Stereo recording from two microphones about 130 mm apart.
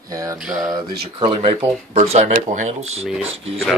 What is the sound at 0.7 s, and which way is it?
Speech, 45° right (ahead or behind).